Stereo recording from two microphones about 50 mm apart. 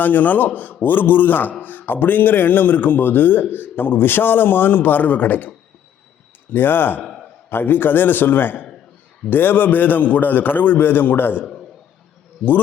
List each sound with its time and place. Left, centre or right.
0.0 s a man's voice: left
6.5 s speech: left
7.0 s a sound: centre
7.5 s a man's voice: left